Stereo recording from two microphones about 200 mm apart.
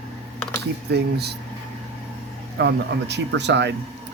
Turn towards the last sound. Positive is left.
turn(degrees=-60)  # may be behind; listen again after turning